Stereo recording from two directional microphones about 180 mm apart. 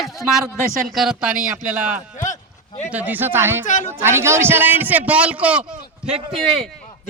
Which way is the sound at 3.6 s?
45° left (ahead or behind).